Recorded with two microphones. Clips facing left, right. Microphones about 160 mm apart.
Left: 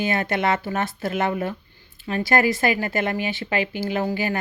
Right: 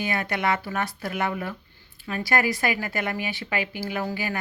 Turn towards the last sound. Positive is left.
turn(degrees=30)  # may be behind; listen again after turning